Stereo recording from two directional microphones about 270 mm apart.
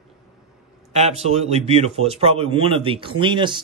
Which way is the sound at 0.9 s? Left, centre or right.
Right.